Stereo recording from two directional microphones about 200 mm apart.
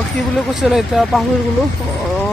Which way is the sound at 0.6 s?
Centre (ahead or behind).